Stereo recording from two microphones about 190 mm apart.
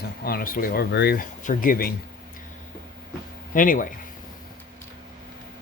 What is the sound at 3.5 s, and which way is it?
Speech, 45° left (ahead or behind).